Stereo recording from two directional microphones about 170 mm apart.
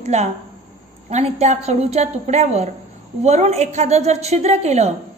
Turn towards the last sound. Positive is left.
turn(degrees=-40)  # may be behind; listen again after turning